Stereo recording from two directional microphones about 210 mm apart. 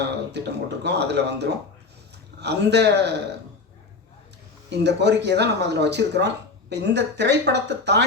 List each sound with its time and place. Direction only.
0.3 s speech: 55° right (ahead or behind)
4.7 s speech: 55° right (ahead or behind)